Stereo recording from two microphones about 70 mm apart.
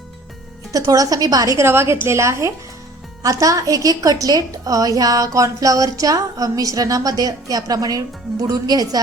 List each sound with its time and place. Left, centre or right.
0.7 s a woman's voice: right
1.5 s a woman's voice: right
3.2 s a woman's voice: right